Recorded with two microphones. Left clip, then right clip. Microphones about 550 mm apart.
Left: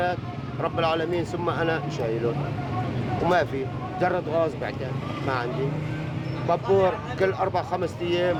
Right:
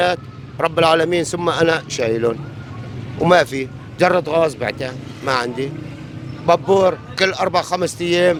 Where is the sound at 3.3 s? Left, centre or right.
Right.